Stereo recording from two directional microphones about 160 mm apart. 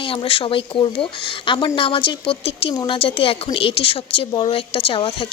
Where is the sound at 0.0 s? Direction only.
35° left (ahead or behind).